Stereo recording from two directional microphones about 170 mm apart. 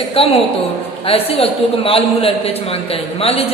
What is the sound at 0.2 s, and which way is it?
A man's voice, 35° left (ahead or behind).